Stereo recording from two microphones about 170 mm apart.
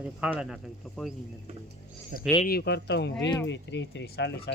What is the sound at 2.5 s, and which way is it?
Speech, 75° left (ahead or behind).